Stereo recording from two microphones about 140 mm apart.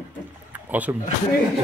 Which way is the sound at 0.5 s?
10° right (ahead or behind).